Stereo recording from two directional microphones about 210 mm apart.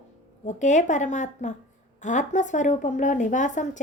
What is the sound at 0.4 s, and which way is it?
Speech, 35° left (ahead or behind).